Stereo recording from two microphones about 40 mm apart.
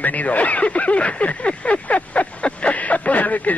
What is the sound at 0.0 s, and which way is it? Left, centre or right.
Speech, left.